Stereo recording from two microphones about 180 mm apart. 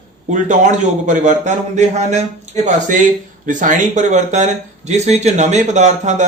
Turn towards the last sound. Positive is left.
turn(degrees=-40)  # may be behind; listen again after turning